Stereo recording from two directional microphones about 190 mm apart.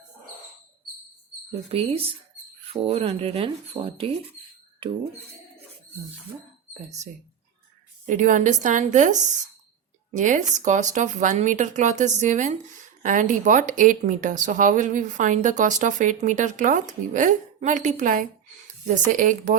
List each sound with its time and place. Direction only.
1.7 s a woman's voice: 30° right (ahead or behind)
8.0 s a woman's voice: 40° right (ahead or behind)